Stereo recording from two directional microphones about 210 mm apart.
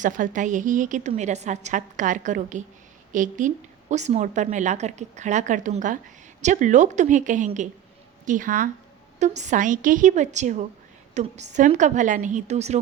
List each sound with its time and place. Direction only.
0.0 s a woman's voice: 40° right (ahead or behind)